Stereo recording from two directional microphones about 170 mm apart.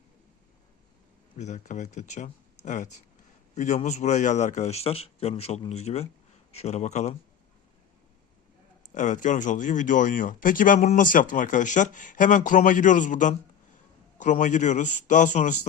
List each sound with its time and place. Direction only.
1.4 s a man's voice: 45° left (ahead or behind)
8.9 s speech: 50° left (ahead or behind)